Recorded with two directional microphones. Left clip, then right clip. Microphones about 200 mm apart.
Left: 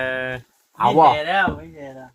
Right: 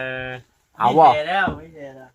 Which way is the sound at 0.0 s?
55° left (ahead or behind).